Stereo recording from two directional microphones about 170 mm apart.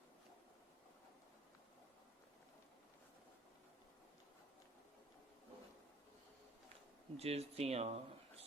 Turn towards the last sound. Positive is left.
turn(degrees=-40)  # may be behind; listen again after turning